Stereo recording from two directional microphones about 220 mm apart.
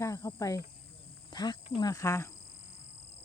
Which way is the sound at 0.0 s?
15° left (ahead or behind).